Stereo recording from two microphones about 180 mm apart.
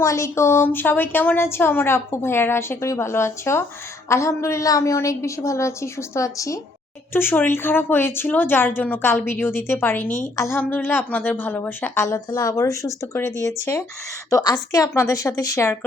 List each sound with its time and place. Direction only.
0.0 s a woman's voice: 15° left (ahead or behind)